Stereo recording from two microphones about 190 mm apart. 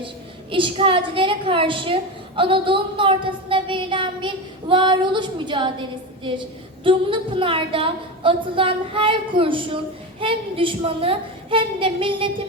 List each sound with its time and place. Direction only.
0.5 s a woman's voice: 25° right (ahead or behind)